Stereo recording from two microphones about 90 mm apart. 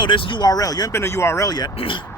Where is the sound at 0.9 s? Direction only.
30° left (ahead or behind).